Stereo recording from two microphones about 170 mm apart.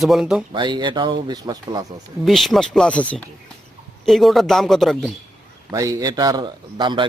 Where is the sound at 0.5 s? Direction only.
25° right (ahead or behind).